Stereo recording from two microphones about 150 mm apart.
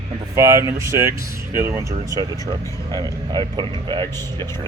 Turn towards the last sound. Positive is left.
turn(degrees=-30)  # may be behind; listen again after turning